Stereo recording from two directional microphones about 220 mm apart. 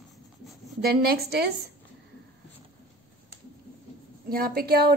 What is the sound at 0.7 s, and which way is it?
Speech, 45° right (ahead or behind).